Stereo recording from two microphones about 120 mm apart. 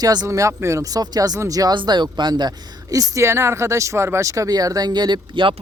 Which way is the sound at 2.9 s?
25° right (ahead or behind).